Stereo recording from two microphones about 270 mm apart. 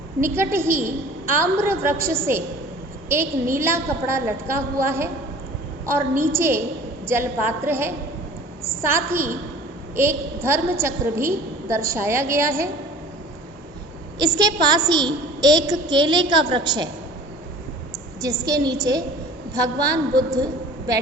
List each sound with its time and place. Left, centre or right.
0.2 s a woman's voice: centre
14.2 s a woman's voice: centre
18.2 s a woman's voice: centre